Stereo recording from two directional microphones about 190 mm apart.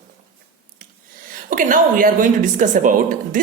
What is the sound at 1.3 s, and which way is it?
A woman's voice, 45° right (ahead or behind).